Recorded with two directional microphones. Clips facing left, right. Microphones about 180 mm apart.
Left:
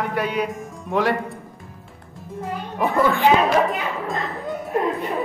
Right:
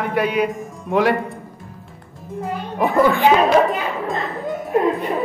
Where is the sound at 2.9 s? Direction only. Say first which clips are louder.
Right 3 dB; 15° right (ahead or behind).